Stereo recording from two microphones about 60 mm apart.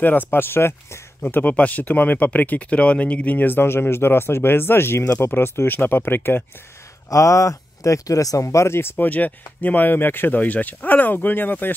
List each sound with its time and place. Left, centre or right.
0.0 s speech: left
1.2 s speech: left
7.1 s speech: left
8.9 s speech: left